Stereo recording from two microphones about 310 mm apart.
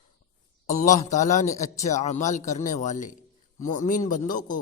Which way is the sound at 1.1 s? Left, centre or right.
Left.